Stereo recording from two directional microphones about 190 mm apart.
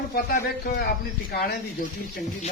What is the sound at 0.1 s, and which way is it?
Speech, 50° left (ahead or behind).